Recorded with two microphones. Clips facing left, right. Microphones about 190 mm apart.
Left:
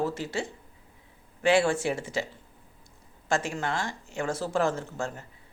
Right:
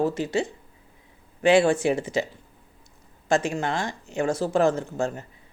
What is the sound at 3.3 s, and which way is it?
A woman's voice, 20° right (ahead or behind).